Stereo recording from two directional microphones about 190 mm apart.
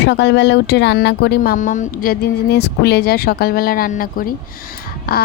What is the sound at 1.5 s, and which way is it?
A woman's voice, 40° left (ahead or behind).